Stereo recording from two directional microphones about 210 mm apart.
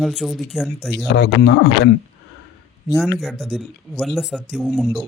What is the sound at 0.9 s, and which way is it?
Speech, 55° left (ahead or behind).